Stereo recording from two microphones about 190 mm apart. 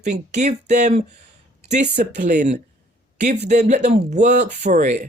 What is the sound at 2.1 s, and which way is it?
Speech, 40° right (ahead or behind).